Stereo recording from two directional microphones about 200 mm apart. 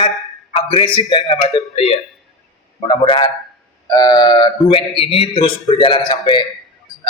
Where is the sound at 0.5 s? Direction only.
25° left (ahead or behind).